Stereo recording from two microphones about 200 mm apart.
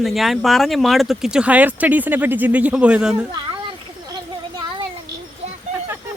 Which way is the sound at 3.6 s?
25° right (ahead or behind).